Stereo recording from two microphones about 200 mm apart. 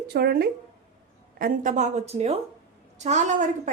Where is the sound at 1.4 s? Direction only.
40° right (ahead or behind).